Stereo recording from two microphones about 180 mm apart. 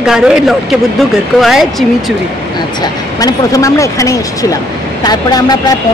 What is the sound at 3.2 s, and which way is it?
A woman's voice, 20° left (ahead or behind).